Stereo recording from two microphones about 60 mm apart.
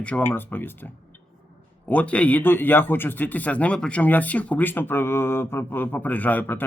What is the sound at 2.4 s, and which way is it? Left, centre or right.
Speech, left.